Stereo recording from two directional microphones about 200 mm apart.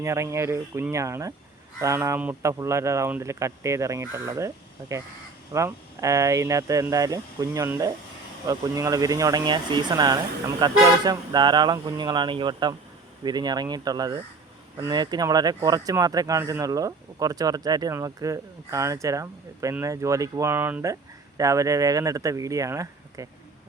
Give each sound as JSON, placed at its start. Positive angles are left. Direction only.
{"t": 0.0, "sound": "speech", "side_deg": -15}